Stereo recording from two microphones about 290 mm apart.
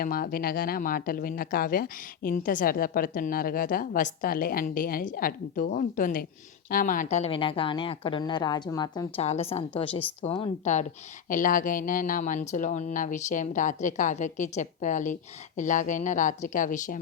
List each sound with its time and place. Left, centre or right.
0.0 s speech: left